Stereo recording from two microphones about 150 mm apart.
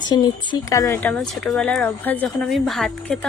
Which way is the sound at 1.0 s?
5° left (ahead or behind).